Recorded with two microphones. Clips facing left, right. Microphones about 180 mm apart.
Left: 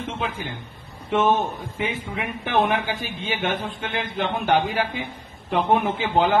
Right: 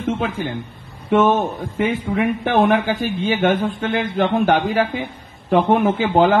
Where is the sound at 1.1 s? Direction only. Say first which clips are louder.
Right 5 dB; 45° right (ahead or behind).